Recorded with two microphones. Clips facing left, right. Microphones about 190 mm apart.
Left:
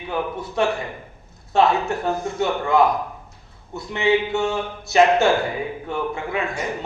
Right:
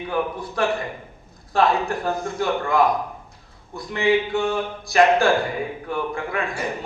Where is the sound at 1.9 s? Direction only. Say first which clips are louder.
Left 1 dB; 25° left (ahead or behind).